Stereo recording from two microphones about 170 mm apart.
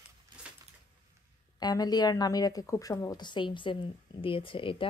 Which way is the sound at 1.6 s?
25° left (ahead or behind).